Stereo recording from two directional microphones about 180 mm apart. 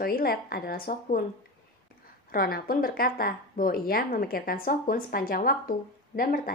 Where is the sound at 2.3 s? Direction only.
55° left (ahead or behind).